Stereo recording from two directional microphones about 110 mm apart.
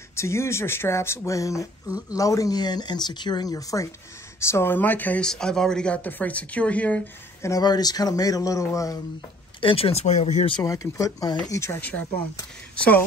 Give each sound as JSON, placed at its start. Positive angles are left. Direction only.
{"t": 0.1, "sound": "speech", "side_deg": 25}
{"t": 7.4, "sound": "speech", "side_deg": 35}
{"t": 9.6, "sound": "speech", "side_deg": 55}
{"t": 10.6, "sound": "speech", "side_deg": 30}
{"t": 12.7, "sound": "speech", "side_deg": 10}